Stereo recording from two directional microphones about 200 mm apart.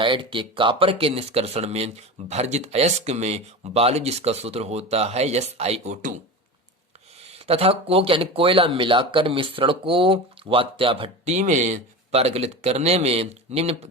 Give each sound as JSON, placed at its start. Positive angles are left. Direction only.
{"t": 0.0, "sound": "speech", "side_deg": -25}
{"t": 7.3, "sound": "speech", "side_deg": -30}